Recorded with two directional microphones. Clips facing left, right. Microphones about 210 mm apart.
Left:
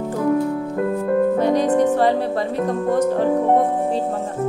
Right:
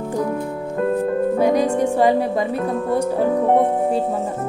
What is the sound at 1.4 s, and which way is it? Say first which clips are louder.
Speech: even; 10° right (ahead or behind).